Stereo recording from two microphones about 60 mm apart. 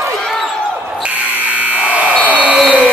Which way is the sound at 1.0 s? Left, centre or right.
Right.